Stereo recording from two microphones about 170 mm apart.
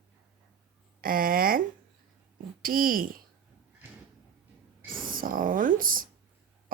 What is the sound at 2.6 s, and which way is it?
Speech, 55° right (ahead or behind).